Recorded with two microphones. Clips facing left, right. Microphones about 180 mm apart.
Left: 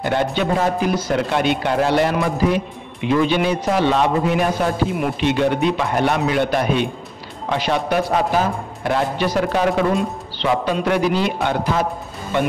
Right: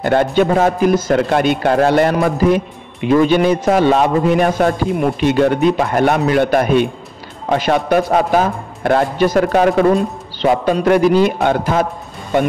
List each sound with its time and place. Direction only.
0.0 s a man's voice: 50° right (ahead or behind)